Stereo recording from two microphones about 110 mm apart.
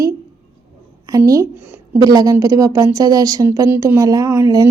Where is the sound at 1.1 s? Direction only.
30° right (ahead or behind).